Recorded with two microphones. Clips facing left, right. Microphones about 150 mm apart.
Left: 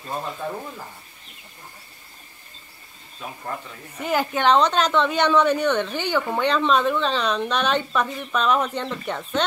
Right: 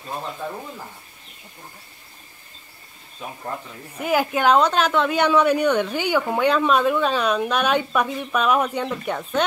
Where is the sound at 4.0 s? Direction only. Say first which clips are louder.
Right 2 dB; 5° right (ahead or behind).